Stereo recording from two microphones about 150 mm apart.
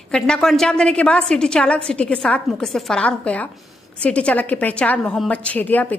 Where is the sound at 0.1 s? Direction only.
5° left (ahead or behind).